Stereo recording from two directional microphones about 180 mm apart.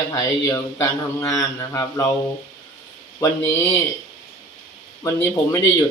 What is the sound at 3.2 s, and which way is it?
Speech, 15° left (ahead or behind).